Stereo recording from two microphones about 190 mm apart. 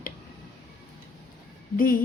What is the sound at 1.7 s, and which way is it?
Speech, 45° left (ahead or behind).